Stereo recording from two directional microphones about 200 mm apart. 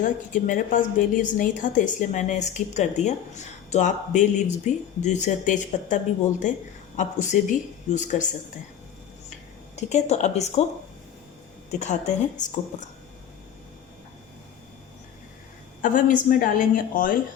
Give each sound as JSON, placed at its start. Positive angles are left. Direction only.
{"t": 0.0, "sound": "a woman's voice", "side_deg": 40}
{"t": 9.7, "sound": "a woman's voice", "side_deg": 35}
{"t": 11.8, "sound": "a woman's voice", "side_deg": 35}
{"t": 15.8, "sound": "a woman's voice", "side_deg": 40}